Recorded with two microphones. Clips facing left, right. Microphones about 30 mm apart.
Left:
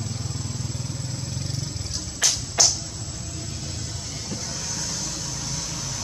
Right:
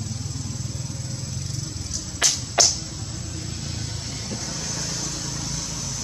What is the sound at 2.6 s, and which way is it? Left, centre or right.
Music, right.